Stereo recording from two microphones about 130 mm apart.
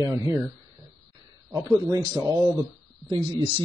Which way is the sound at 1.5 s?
30° right (ahead or behind).